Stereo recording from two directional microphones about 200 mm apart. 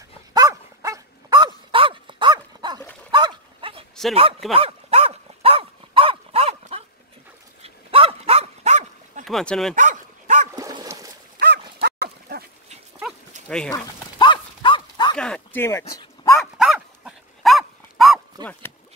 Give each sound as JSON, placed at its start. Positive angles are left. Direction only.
{"t": 0.3, "sound": "dog", "side_deg": -15}
{"t": 4.1, "sound": "speech", "side_deg": -30}
{"t": 4.6, "sound": "dog", "side_deg": -30}
{"t": 9.2, "sound": "speech", "side_deg": 0}
{"t": 9.8, "sound": "dog", "side_deg": -40}
{"t": 10.5, "sound": "dog", "side_deg": -20}
{"t": 11.3, "sound": "dog", "side_deg": -55}
{"t": 13.5, "sound": "speech", "side_deg": 5}
{"t": 13.7, "sound": "dog", "side_deg": 20}
{"t": 15.1, "sound": "speech", "side_deg": 5}
{"t": 16.3, "sound": "dog", "side_deg": 0}